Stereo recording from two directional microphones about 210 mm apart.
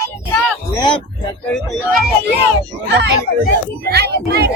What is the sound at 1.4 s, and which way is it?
Speech, 5° left (ahead or behind).